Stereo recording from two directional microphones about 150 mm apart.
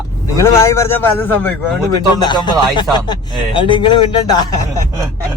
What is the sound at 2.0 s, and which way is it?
Speech, 30° left (ahead or behind).